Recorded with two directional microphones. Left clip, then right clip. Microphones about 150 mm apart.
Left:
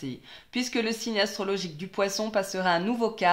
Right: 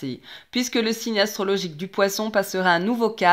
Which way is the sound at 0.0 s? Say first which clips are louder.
Right 6 dB; 35° right (ahead or behind).